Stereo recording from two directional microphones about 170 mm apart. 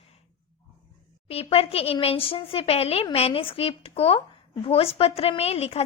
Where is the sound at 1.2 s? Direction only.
35° left (ahead or behind).